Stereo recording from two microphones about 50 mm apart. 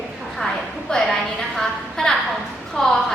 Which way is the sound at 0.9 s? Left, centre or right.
Centre.